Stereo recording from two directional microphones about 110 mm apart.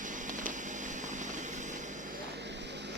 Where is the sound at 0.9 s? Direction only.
90° right.